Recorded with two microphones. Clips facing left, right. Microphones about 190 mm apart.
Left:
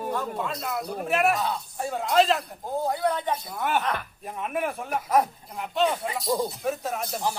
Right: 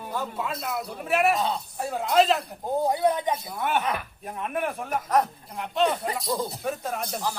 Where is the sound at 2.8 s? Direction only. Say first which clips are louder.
Right 3 dB; 20° right (ahead or behind).